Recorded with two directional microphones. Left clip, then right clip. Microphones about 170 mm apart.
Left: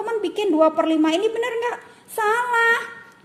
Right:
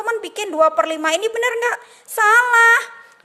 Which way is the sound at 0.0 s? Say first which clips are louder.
Even; 30° right (ahead or behind).